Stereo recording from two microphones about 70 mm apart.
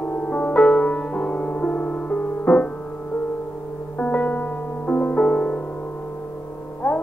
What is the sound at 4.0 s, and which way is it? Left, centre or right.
Music, centre.